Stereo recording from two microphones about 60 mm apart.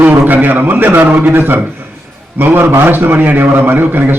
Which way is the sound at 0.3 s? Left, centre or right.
Right.